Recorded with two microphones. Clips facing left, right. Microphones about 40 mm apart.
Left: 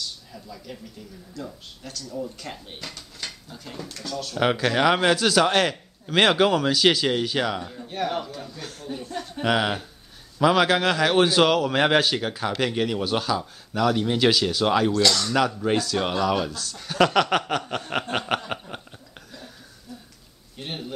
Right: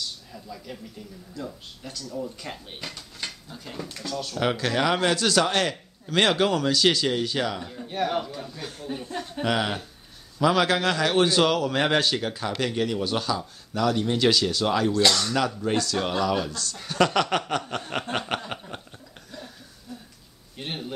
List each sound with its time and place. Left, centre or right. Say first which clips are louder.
0.3 s speech: even; centre
2.8 s speech: right 1 dB; centre
3.4 s speech: right 1 dB; centre
4.4 s a man's voice: left 3 dB; centre
7.6 s speech: right 1 dB; centre
9.4 s a man's voice: left 3 dB; centre
14.9 s speech: even; right
15.7 s a man's voice: left 2 dB; centre
18.1 s a sound: left 3 dB; centre
20.5 s a sound: even; centre